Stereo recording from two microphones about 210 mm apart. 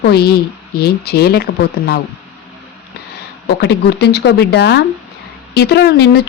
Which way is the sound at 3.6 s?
55° left (ahead or behind).